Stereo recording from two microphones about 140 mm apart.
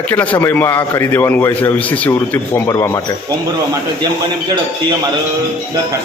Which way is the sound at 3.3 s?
25° right (ahead or behind).